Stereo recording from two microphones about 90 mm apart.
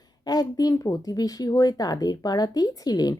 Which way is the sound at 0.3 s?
45° left (ahead or behind).